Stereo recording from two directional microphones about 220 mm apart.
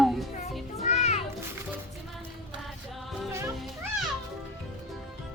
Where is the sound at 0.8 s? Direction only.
30° left (ahead or behind).